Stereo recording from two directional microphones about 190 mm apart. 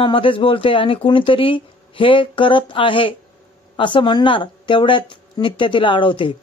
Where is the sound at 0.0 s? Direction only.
25° left (ahead or behind).